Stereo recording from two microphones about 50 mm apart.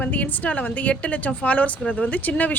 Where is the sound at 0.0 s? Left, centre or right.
Left.